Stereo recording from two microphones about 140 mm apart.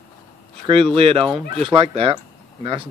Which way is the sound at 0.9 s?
40° right (ahead or behind).